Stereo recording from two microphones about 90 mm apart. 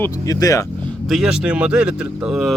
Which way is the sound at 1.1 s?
5° right (ahead or behind).